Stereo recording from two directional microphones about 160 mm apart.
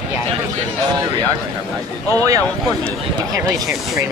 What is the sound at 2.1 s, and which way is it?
Speech, 20° right (ahead or behind).